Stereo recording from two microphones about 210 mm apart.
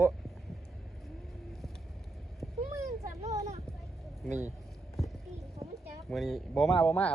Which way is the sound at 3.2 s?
15° right (ahead or behind).